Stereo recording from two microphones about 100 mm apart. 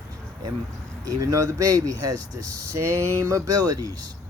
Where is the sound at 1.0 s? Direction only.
35° right (ahead or behind).